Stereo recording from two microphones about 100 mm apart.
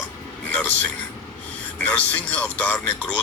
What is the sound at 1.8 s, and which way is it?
Speech, 15° left (ahead or behind).